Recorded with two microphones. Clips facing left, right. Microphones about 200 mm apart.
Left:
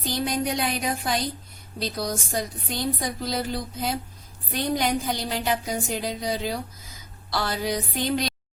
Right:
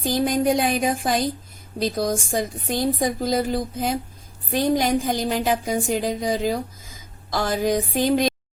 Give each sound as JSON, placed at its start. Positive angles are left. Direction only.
{"t": 0.0, "sound": "speech", "side_deg": -50}